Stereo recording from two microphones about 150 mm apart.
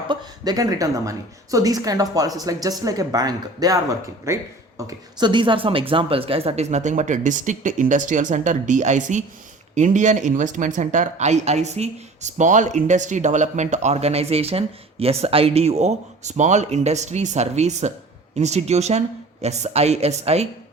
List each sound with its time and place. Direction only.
0.1 s a woman's voice: 25° right (ahead or behind); by 20.5 s 45° right (ahead or behind)